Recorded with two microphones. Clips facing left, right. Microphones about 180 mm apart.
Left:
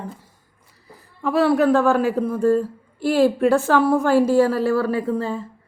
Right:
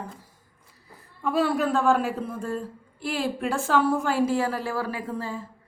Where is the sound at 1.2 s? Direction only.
75° left (ahead or behind).